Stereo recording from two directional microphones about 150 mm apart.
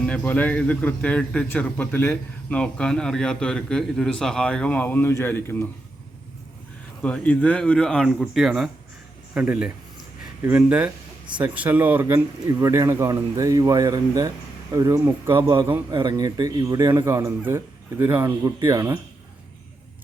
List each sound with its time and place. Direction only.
0.0 s a man's voice: 10° left (ahead or behind)
7.0 s a man's voice: 10° left (ahead or behind); by 18.9 s 20° right (ahead or behind)